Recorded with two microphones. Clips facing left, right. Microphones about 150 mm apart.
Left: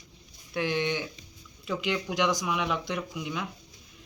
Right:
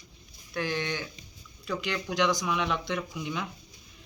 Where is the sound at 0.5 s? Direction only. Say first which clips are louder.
Left 3 dB; 15° left (ahead or behind).